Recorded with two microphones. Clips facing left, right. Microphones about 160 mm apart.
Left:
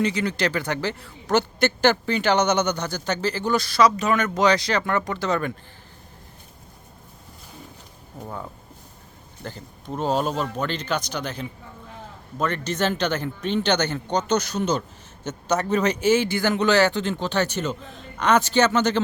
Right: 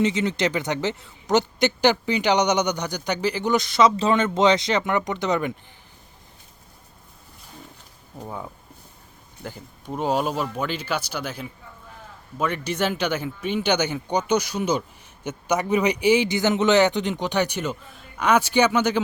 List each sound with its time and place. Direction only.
0.0 s a man's voice: 20° right (ahead or behind)
8.2 s speech: 10° right (ahead or behind)